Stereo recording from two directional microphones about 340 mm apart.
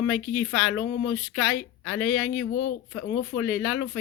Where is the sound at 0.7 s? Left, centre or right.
Left.